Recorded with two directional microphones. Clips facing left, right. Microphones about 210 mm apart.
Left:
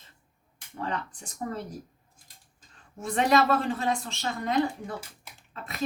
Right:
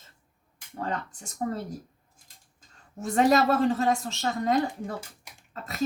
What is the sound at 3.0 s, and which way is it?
A woman's voice, 40° right (ahead or behind).